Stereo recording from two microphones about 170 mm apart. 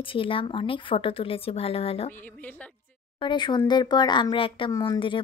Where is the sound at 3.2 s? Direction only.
25° left (ahead or behind).